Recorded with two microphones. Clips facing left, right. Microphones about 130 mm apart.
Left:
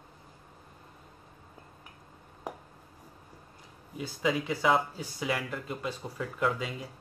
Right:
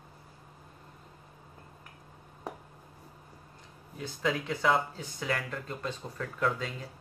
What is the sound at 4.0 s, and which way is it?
Speech, 5° left (ahead or behind).